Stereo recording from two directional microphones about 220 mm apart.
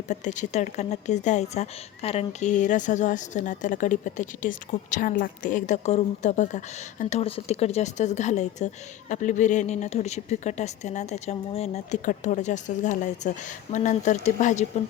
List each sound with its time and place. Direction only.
0.1 s a woman's voice: 35° left (ahead or behind)